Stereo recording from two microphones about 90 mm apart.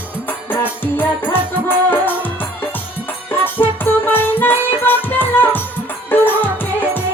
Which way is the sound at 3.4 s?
20° left (ahead or behind).